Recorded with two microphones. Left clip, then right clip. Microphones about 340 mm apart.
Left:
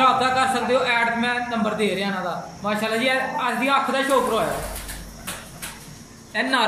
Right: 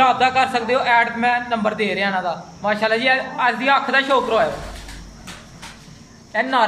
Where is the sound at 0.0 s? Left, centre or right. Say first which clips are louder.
Right 3 dB; right.